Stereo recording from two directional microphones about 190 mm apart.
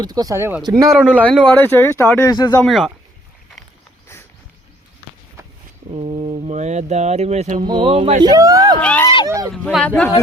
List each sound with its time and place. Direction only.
0.0 s speech: 20° right (ahead or behind)
0.9 s a man's voice: 5° right (ahead or behind)
1.2 s speech: 10° left (ahead or behind)
2.6 s a man's voice: centre (ahead or behind)
5.4 s walk: 15° right (ahead or behind)
5.9 s speech: 30° right (ahead or behind)
7.6 s speech: 25° right (ahead or behind)
8.3 s speech: 20° right (ahead or behind)
8.8 s speech: 5° left (ahead or behind)
9.2 s speech: 15° right (ahead or behind)
9.5 s speech: 5° left (ahead or behind)